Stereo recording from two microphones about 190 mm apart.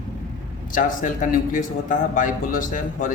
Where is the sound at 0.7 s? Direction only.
45° left (ahead or behind).